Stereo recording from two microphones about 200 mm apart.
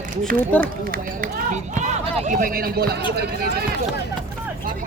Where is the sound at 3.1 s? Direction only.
55° right (ahead or behind).